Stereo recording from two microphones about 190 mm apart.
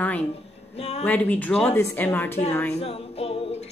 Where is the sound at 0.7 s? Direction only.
35° left (ahead or behind).